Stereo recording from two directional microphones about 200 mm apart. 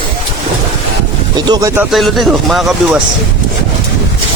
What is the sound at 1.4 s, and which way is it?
Speech, 20° right (ahead or behind).